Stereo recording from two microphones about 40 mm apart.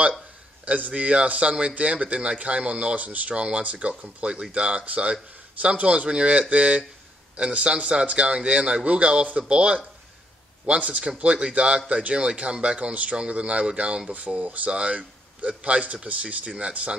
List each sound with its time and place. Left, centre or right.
0.7 s speech: right
14.1 s a man's voice: right